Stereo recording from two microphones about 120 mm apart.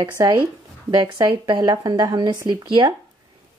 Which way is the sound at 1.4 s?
35° right (ahead or behind).